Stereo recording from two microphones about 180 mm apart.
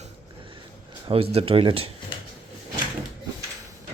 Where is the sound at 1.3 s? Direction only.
30° right (ahead or behind).